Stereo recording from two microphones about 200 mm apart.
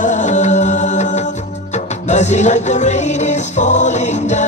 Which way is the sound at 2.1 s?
35° left (ahead or behind).